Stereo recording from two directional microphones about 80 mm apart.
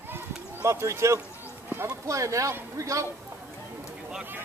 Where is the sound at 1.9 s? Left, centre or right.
Right.